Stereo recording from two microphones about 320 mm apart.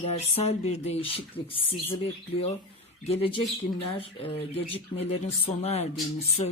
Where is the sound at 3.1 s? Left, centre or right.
Centre.